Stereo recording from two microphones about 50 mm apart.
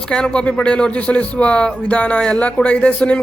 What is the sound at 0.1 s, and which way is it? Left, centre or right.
Speech, centre.